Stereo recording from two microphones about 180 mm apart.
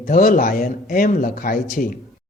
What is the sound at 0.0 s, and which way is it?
Speech, 50° left (ahead or behind).